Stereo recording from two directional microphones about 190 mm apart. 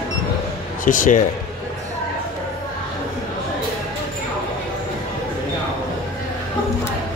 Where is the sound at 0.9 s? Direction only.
45° left (ahead or behind).